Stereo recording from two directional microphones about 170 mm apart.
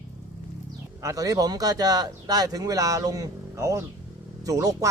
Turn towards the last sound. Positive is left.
turn(degrees=-20)  # may be behind; listen again after turning